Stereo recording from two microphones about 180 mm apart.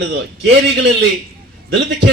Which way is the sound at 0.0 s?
80° right.